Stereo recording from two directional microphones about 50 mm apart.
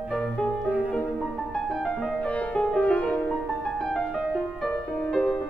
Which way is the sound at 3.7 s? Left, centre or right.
Centre.